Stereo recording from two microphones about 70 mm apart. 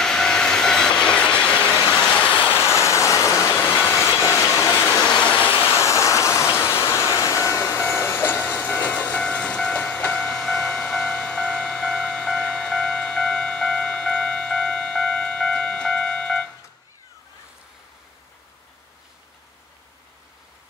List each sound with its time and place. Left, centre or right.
0.0 s train: centre
2.0 s vehicle: centre
2.8 s vehicle: left
3.5 s train: left
4.1 s a sound: left
5.0 s vehicle: centre
5.4 s vehicle: right
5.9 s vehicle: left
7.2 s train: left; by 16.4 s centre